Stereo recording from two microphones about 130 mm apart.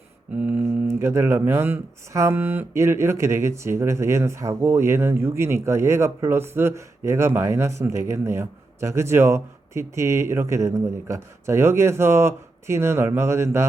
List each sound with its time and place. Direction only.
0.3 s speech: 10° right (ahead or behind)